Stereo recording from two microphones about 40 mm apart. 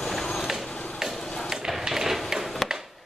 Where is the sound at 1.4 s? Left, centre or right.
Centre.